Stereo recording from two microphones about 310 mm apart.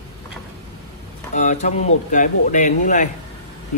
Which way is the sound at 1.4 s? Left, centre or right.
Left.